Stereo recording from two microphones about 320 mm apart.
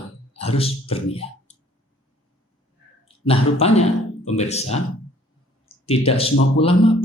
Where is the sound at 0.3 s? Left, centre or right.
Centre.